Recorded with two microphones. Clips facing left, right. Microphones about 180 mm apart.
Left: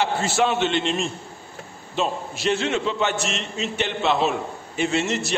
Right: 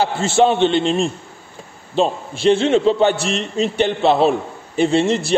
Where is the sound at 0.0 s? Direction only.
30° right (ahead or behind).